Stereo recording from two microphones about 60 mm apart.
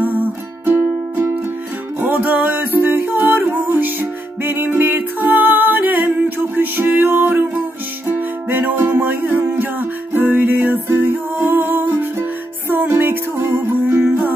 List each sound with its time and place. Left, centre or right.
0.7 s music: right
2.0 s music: right